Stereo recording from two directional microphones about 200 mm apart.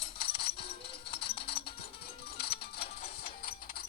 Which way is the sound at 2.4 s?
50° left (ahead or behind).